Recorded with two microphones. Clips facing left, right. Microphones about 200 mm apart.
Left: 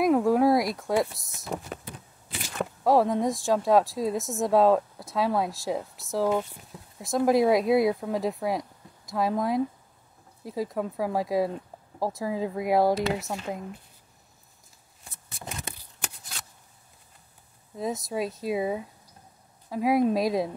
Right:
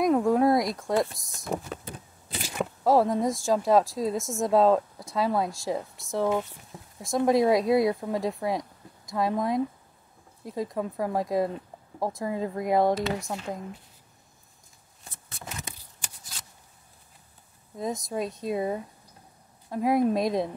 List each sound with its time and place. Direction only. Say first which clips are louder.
0.0 s speech: left 1 dB; centre (ahead or behind)
2.6 s speech: even; centre (ahead or behind)
15.6 s shuffling cards: left 5 dB; 65° left (ahead or behind)
17.7 s speech: left 1 dB; centre (ahead or behind)